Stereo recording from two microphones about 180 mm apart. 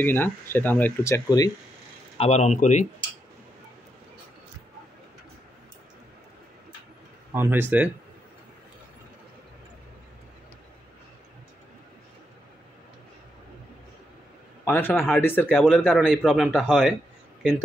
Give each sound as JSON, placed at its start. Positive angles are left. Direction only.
{"t": 0.0, "sound": "speech", "side_deg": 10}
{"t": 2.1, "sound": "speech", "side_deg": 35}
{"t": 7.3, "sound": "speech", "side_deg": -15}
{"t": 14.6, "sound": "a man's voice", "side_deg": 10}